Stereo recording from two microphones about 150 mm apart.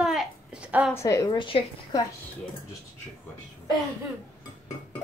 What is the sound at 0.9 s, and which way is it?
A woman's voice, 20° left (ahead or behind).